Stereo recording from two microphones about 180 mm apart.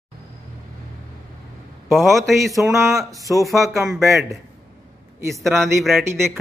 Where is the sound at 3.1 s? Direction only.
20° right (ahead or behind).